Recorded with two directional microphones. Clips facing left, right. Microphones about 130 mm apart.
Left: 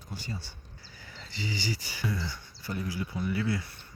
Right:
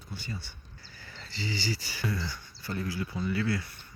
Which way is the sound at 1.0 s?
15° left (ahead or behind).